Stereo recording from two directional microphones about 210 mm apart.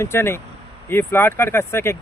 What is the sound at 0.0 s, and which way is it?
Speech, 10° left (ahead or behind).